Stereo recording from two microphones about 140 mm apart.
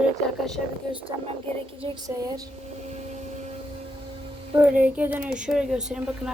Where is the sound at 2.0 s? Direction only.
25° right (ahead or behind).